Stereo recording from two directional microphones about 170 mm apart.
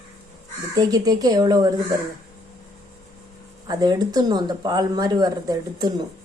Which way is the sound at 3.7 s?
25° right (ahead or behind).